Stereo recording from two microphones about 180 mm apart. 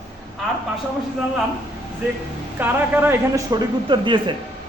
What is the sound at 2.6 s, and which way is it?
A woman's voice, 10° right (ahead or behind).